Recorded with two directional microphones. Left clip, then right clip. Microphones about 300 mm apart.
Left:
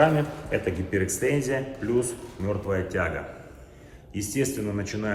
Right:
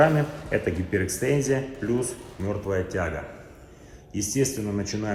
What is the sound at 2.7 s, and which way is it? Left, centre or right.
Speech, centre.